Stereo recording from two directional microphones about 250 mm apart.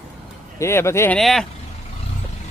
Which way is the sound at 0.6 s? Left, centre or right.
Centre.